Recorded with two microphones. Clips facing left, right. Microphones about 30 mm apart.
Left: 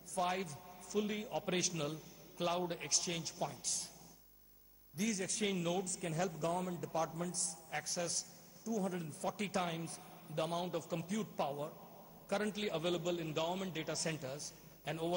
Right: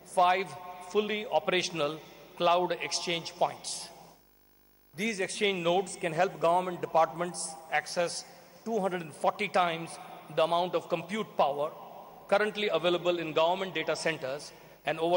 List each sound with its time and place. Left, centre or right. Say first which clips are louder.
0.1 s a man's voice: right 12 dB; right
4.9 s a man's voice: right 7 dB; right